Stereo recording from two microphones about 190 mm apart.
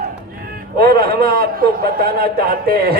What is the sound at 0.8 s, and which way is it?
A man's voice, 55° right (ahead or behind).